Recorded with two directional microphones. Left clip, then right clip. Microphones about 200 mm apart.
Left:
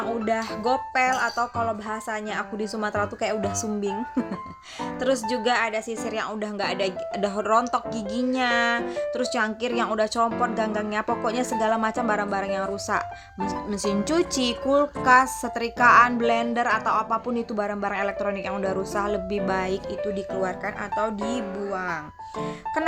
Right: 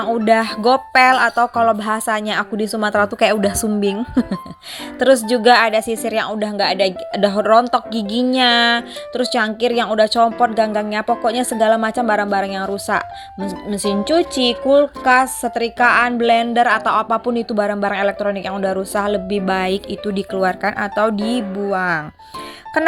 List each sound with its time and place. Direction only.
0.3 s a woman's voice: 30° right (ahead or behind)
7.9 s speech: centre (ahead or behind)
8.4 s a woman's voice: 30° right (ahead or behind)